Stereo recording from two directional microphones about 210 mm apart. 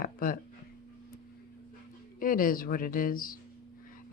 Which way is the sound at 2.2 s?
40° left (ahead or behind).